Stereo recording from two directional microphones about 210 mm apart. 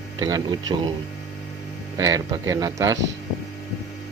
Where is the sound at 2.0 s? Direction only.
15° right (ahead or behind).